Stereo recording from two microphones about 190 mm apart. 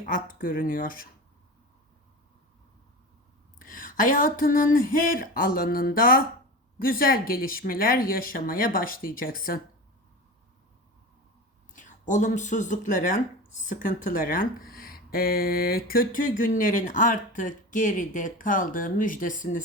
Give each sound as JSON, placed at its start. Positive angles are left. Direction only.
{"t": 0.1, "sound": "speech", "side_deg": 45}
{"t": 3.7, "sound": "speech", "side_deg": 45}
{"t": 11.7, "sound": "speech", "side_deg": 40}